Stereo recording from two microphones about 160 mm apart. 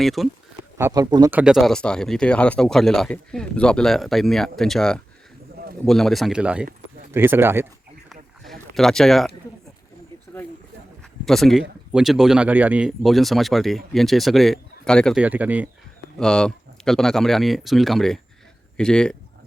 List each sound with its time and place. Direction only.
0.0 s speech: centre (ahead or behind)
0.8 s speech: 20° right (ahead or behind)
1.3 s speech: 5° right (ahead or behind)
8.1 s a sound: centre (ahead or behind)
11.3 s speech: centre (ahead or behind)
15.2 s speech: 10° right (ahead or behind)
16.1 s speech: 5° left (ahead or behind)